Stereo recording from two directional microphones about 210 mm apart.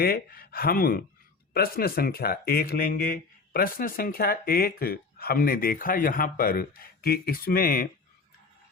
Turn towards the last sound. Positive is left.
turn(degrees=45)  # may be behind; listen again after turning